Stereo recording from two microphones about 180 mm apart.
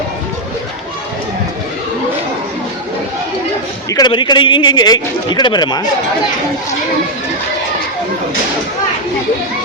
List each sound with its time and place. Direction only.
3.8 s a man's voice: 20° left (ahead or behind)